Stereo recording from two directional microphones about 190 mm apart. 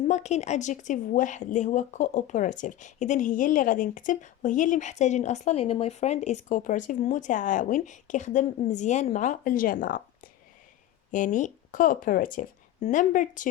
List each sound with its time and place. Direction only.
0.1 s speech: 35° left (ahead or behind)
11.1 s speech: 40° left (ahead or behind)